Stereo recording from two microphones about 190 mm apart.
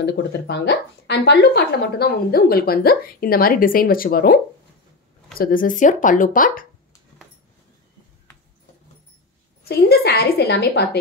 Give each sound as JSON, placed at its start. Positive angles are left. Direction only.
{"t": 0.0, "sound": "speech", "side_deg": 65}
{"t": 5.4, "sound": "speech", "side_deg": 45}
{"t": 9.7, "sound": "a woman's voice", "side_deg": 55}